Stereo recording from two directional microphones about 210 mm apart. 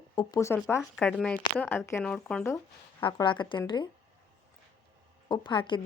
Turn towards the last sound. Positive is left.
turn(degrees=25)  # may be behind; listen again after turning